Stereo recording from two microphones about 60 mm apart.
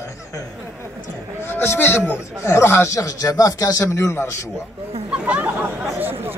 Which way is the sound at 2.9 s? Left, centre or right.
Left.